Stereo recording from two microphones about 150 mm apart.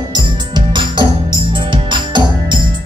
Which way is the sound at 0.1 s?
30° right (ahead or behind).